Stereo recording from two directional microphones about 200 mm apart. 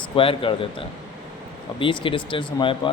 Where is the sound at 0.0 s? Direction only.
25° left (ahead or behind).